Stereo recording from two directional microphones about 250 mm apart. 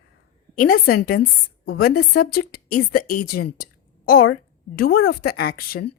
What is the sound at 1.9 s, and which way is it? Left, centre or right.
Speech, left.